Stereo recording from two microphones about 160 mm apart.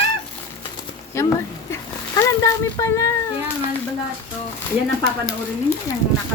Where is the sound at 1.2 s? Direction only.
15° left (ahead or behind).